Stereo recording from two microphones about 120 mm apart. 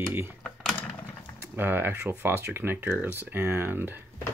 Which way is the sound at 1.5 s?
15° right (ahead or behind).